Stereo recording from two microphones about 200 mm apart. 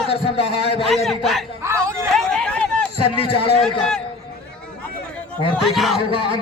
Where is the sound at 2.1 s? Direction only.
5° left (ahead or behind).